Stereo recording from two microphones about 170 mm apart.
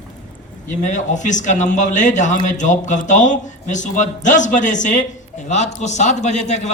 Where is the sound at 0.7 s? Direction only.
50° left (ahead or behind).